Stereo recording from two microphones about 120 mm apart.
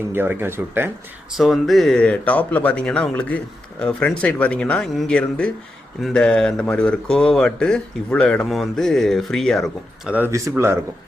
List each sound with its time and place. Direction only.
0.1 s speech: 20° right (ahead or behind)
1.4 s speech: centre (ahead or behind)
10.1 s speech: 15° right (ahead or behind)